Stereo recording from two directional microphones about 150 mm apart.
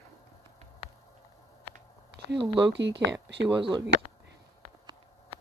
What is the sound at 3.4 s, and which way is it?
Speech, 30° right (ahead or behind).